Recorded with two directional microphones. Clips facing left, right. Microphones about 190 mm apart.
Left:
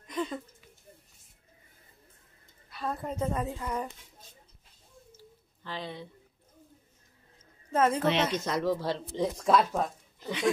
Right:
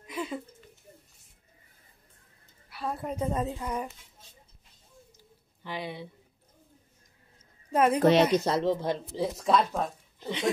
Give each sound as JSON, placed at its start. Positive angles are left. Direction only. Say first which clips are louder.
{"t": 0.0, "sound": "a sound", "louder": "left 1 dB", "side_deg": -10}
{"t": 2.7, "sound": "a woman's voice", "louder": "right 1 dB", "side_deg": -10}
{"t": 5.1, "sound": "a sound", "louder": "left 5 dB", "side_deg": -15}
{"t": 7.7, "sound": "a woman's voice", "louder": "right 2 dB", "side_deg": -15}
{"t": 8.0, "sound": "speech", "louder": "right 6 dB", "side_deg": -40}
{"t": 9.1, "sound": "speech", "louder": "left 1 dB", "side_deg": -5}